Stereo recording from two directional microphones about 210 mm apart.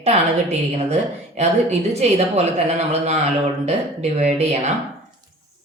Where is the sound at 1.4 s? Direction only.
35° right (ahead or behind).